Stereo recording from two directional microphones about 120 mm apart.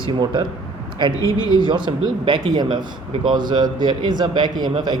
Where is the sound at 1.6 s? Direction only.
40° right (ahead or behind).